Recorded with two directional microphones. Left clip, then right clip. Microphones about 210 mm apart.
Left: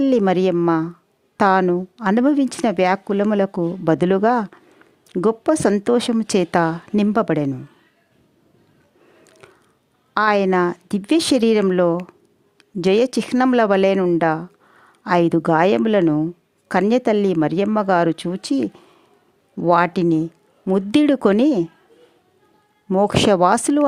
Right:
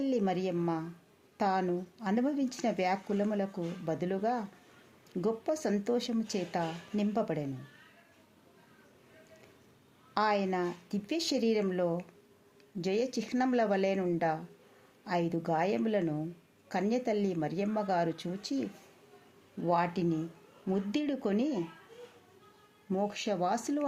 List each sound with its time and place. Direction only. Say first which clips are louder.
0.0 s a woman's voice: left 15 dB; 55° left (ahead or behind)
9.4 s a sound: left 13 dB; 50° left (ahead or behind)
10.2 s a woman's voice: left 14 dB; 55° left (ahead or behind)
22.9 s speech: left 18 dB; 55° left (ahead or behind)